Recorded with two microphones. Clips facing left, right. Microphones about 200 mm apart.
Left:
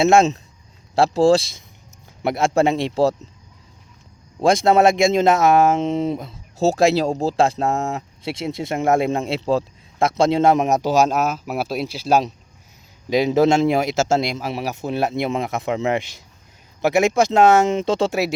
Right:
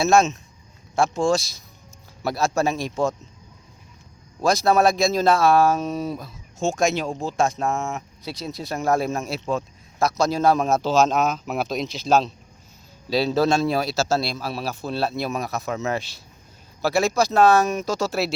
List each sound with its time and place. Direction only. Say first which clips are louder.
0.1 s speech: left 3 dB; 25° left (ahead or behind)
4.4 s speech: left 4 dB; 25° left (ahead or behind)
6.6 s speech: left 6 dB; 35° left (ahead or behind)
18.1 s speech: left 3 dB; 15° left (ahead or behind)